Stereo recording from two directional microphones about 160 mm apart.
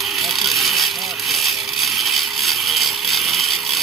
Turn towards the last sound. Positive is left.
turn(degrees=0)  # may be behind; listen again after turning